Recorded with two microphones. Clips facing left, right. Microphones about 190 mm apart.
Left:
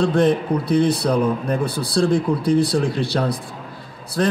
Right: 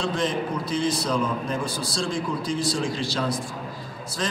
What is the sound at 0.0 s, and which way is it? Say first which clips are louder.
A man's voice: left 8 dB; 60° left (ahead or behind).